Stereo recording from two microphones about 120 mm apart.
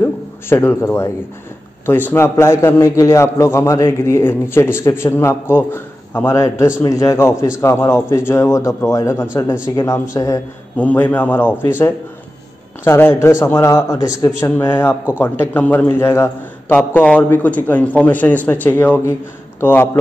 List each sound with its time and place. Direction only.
0.0 s a sound: 20° left (ahead or behind)
1.9 s a man's voice: 20° left (ahead or behind)
10.8 s a man's voice: 15° left (ahead or behind)
12.8 s a man's voice: 20° left (ahead or behind)
14.4 s a man's voice: 20° left (ahead or behind)
16.7 s a man's voice: 10° left (ahead or behind)